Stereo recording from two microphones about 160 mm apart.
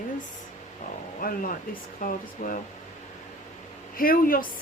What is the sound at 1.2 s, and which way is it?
Speech, 60° left (ahead or behind).